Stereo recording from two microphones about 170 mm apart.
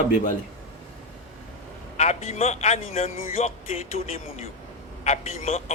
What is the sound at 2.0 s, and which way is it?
A man's voice, 40° left (ahead or behind).